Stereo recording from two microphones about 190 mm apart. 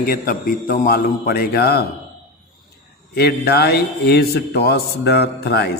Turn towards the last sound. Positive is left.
turn(degrees=60)  # may be behind; listen again after turning